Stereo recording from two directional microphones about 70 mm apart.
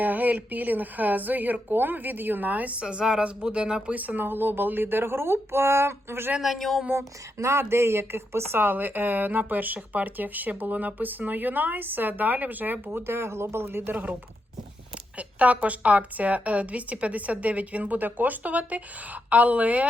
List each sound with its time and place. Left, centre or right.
0.0 s speech: right
2.8 s speech: centre; by 6.3 s right
6.4 s speech: centre
6.9 s speech: right
15.2 s speech: centre